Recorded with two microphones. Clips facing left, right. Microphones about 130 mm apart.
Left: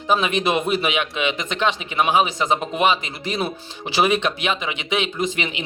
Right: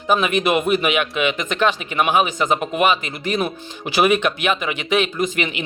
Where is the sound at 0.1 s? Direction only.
30° left (ahead or behind).